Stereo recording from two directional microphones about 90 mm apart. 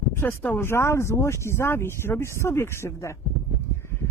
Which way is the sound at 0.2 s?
25° left (ahead or behind).